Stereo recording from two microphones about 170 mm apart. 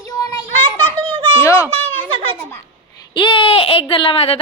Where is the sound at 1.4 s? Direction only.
15° left (ahead or behind).